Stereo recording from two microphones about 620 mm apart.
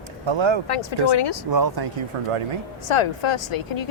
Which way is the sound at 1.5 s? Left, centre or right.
Right.